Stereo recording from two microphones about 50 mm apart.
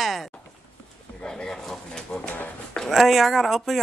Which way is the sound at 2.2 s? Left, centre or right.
Left.